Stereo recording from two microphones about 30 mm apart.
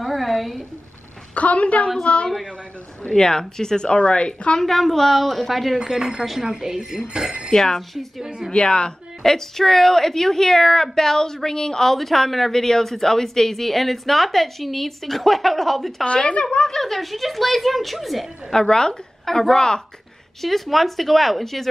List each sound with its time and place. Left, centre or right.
0.0 s a sound: centre
1.3 s a woman's voice: left
3.2 s a woman's voice: left
3.9 s a woman's voice: left
4.6 s a woman's voice: centre
5.9 s speech: centre
7.5 s a woman's voice: centre
8.5 s a woman's voice: left
9.2 s a woman's voice: centre
12.0 s a woman's voice: centre
16.1 s a woman's voice: left
16.6 s speech: centre
18.5 s a woman's voice: centre
20.4 s speech: centre